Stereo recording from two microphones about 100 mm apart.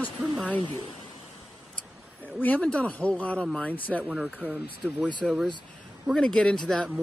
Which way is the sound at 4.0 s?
5° right (ahead or behind).